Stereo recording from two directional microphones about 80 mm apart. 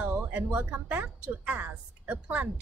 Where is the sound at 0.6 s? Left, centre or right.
Centre.